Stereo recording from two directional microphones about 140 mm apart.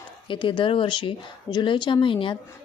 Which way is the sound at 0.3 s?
35° left (ahead or behind).